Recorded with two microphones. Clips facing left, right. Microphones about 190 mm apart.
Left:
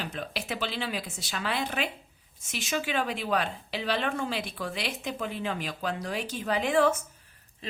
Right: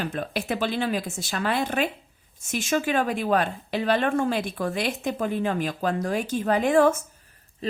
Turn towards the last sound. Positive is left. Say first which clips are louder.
# right 5 dB
turn(degrees=-45)  # may be behind; listen again after turning